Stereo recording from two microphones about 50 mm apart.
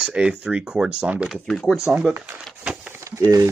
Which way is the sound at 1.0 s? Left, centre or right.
Right.